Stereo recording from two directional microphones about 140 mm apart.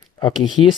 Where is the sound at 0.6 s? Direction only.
30° left (ahead or behind).